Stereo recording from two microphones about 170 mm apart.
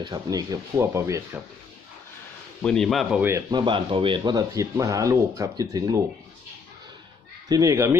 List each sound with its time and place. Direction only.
0.0 s speech: 25° right (ahead or behind)
2.6 s a man's voice: 5° left (ahead or behind)
3.2 s speech: 15° right (ahead or behind)
3.4 s speech: 25° right (ahead or behind)
7.4 s speech: 20° right (ahead or behind)